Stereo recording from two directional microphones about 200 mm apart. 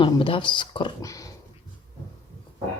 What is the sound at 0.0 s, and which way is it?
Speech, 25° left (ahead or behind).